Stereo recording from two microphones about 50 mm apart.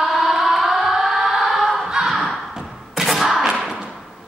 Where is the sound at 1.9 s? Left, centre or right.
Centre.